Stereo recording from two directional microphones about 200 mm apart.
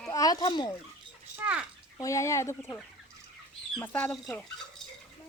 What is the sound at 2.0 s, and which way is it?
Speech, 15° left (ahead or behind).